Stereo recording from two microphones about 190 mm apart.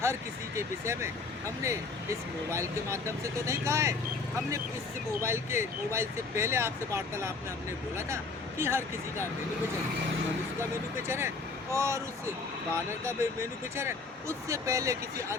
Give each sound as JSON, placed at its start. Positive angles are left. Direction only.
{"t": 0.0, "sound": "speech", "side_deg": -15}
{"t": 5.2, "sound": "speech", "side_deg": -15}
{"t": 11.7, "sound": "speech", "side_deg": -15}
{"t": 13.1, "sound": "speech", "side_deg": -15}